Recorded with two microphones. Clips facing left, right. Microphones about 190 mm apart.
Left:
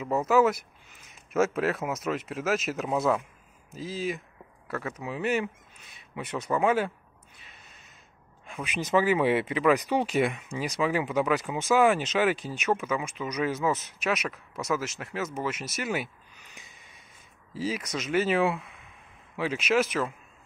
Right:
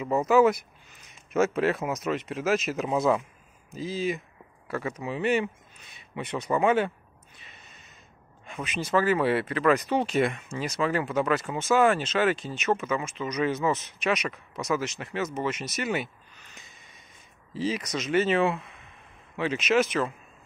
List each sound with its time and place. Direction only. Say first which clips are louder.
0.0 s speech: right 2 dB; 5° left (ahead or behind)
7.3 s a sound: right 2 dB; 5° left (ahead or behind)
8.7 s speech: even; 15° left (ahead or behind)